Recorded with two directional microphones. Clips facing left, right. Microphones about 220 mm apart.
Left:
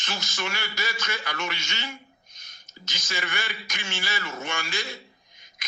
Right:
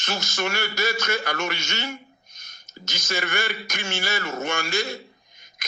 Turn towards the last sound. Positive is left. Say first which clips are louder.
# right 2 dB
turn(degrees=-45)  # may be behind; listen again after turning